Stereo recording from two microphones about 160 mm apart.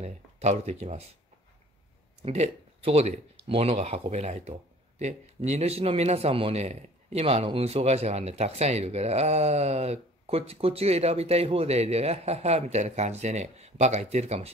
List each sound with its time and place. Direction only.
0.0 s speech: 45° right (ahead or behind)
2.2 s speech: 40° right (ahead or behind)